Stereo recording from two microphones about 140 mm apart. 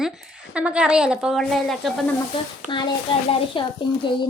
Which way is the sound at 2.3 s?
35° left (ahead or behind).